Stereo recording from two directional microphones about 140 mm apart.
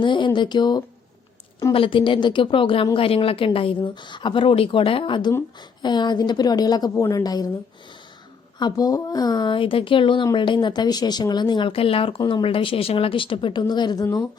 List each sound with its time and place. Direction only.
0.0 s a woman's voice: 35° left (ahead or behind)
8.5 s a woman's voice: 30° left (ahead or behind)